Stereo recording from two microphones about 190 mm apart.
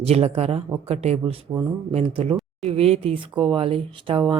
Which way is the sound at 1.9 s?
30° right (ahead or behind).